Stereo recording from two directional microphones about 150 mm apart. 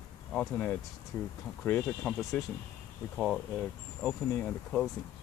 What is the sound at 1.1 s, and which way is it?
Speech, 20° left (ahead or behind).